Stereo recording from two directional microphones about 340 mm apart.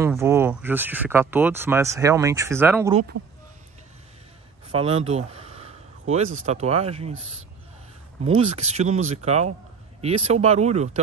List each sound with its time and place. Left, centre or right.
0.0 s speech: centre
4.6 s speech: centre
8.2 s speech: centre